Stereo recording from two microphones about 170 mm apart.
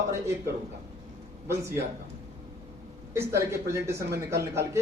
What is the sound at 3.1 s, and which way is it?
A man's voice, 15° right (ahead or behind).